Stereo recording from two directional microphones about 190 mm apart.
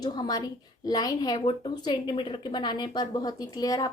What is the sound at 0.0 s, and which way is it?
A woman's voice, 20° left (ahead or behind).